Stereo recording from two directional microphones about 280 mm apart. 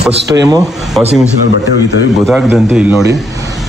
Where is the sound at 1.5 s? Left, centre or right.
Left.